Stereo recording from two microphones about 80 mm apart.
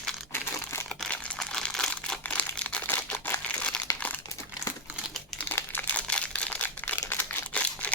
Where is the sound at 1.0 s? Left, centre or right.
Centre.